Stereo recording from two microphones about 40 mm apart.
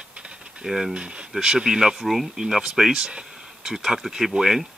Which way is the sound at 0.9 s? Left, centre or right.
Right.